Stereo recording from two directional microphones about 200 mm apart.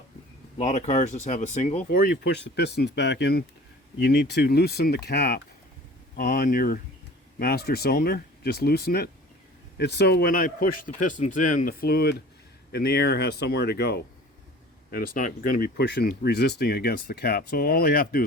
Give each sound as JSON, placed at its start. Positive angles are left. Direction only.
{"t": 0.6, "sound": "speech", "side_deg": 35}
{"t": 1.9, "sound": "speech", "side_deg": 50}